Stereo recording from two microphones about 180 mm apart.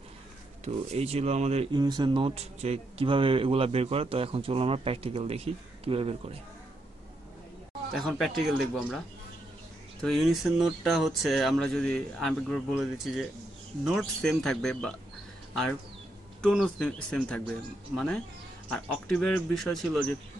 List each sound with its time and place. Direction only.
0.7 s speech: 35° right (ahead or behind)
1.7 s speech: 25° right (ahead or behind)
7.9 s speech: centre (ahead or behind)
10.0 s speech: centre (ahead or behind)
16.3 s speech: 5° left (ahead or behind)